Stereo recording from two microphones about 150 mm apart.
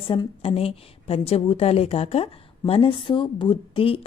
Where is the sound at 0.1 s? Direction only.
35° left (ahead or behind).